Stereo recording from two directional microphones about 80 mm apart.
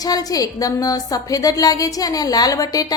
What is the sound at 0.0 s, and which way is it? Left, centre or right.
A woman's voice, left.